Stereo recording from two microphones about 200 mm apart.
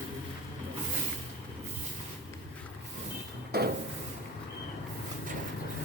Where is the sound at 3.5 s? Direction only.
50° right (ahead or behind).